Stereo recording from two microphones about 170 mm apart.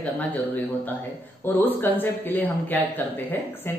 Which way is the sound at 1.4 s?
10° left (ahead or behind).